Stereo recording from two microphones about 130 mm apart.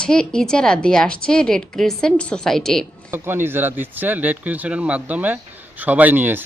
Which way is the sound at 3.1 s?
15° right (ahead or behind).